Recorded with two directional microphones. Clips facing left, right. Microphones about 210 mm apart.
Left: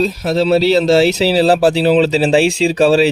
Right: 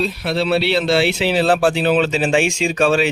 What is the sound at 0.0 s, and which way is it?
Speech, 40° left (ahead or behind).